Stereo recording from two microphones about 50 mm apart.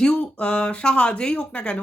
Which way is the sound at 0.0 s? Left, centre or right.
Centre.